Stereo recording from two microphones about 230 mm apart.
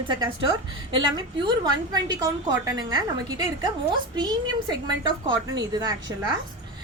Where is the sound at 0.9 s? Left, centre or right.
Centre.